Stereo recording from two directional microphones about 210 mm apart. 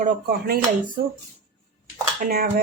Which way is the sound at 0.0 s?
45° right (ahead or behind).